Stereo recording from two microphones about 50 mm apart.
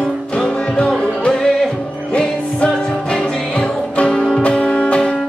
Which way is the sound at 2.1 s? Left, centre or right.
Left.